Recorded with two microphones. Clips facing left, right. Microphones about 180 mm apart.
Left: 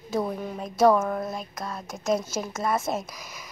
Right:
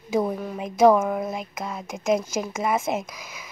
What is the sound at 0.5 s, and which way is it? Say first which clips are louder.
Speech: right 3 dB; 15° right (ahead or behind).